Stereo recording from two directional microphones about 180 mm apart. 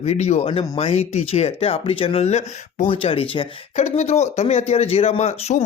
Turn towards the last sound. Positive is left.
turn(degrees=35)  # may be behind; listen again after turning